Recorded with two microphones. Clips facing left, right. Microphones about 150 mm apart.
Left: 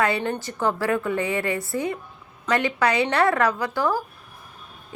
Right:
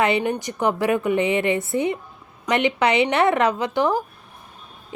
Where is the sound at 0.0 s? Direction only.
20° right (ahead or behind).